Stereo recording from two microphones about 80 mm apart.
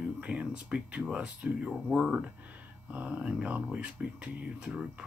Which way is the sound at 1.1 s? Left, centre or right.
Centre.